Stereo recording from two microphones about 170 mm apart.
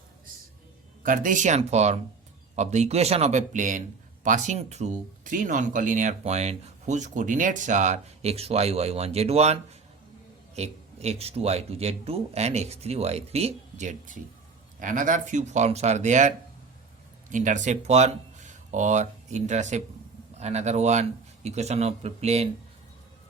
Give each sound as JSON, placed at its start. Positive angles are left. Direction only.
{"t": 1.0, "sound": "speech", "side_deg": -50}